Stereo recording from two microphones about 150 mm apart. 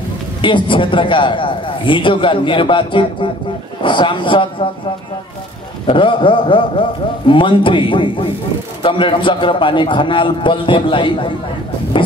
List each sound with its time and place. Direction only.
0.4 s a man's voice: 35° left (ahead or behind)
5.9 s a man's voice: 35° left (ahead or behind)